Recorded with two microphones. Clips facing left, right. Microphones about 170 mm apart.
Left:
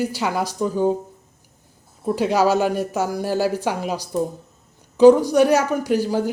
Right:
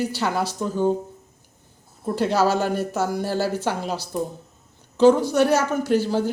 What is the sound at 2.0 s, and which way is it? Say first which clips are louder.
Speech: left 2 dB; 10° left (ahead or behind).